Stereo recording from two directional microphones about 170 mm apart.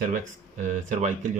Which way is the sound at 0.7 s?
50° right (ahead or behind).